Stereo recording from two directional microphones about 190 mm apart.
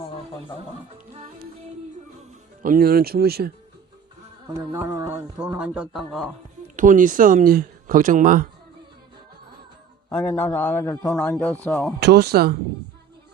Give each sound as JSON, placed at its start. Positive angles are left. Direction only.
{"t": 2.6, "sound": "speech", "side_deg": -50}
{"t": 4.4, "sound": "speech", "side_deg": -15}
{"t": 6.7, "sound": "speech", "side_deg": -45}
{"t": 10.1, "sound": "a man's voice", "side_deg": 5}
{"t": 11.9, "sound": "speech", "side_deg": -60}